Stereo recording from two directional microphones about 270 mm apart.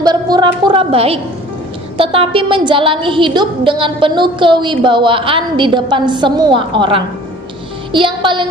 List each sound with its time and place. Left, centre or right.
0.0 s a woman's voice: centre